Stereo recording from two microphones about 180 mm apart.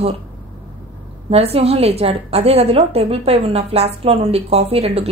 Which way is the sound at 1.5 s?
35° right (ahead or behind).